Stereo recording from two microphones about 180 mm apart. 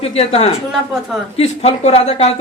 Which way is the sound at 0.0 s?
35° left (ahead or behind).